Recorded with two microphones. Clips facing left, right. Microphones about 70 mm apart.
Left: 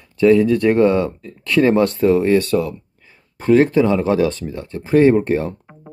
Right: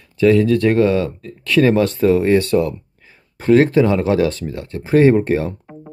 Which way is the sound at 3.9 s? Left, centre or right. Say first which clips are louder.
Even; centre.